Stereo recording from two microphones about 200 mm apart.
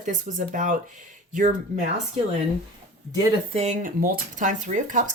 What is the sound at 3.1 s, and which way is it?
Speech, 20° right (ahead or behind).